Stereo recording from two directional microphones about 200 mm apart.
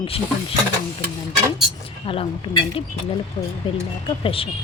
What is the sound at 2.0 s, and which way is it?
Speech, 25° left (ahead or behind).